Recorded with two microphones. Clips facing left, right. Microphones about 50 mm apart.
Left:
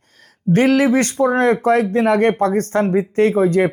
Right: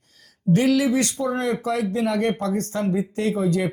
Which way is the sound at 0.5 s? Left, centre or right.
Left.